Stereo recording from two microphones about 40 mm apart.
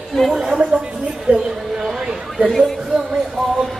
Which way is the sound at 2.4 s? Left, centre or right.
Right.